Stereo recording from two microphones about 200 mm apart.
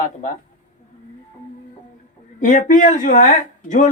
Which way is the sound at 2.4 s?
40° left (ahead or behind).